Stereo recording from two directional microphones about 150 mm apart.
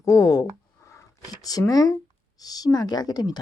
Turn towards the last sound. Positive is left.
turn(degrees=25)  # may be behind; listen again after turning